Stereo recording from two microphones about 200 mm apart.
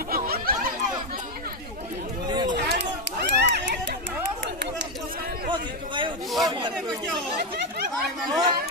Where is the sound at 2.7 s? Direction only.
60° right (ahead or behind).